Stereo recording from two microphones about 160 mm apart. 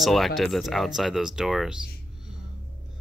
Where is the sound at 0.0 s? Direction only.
Centre (ahead or behind).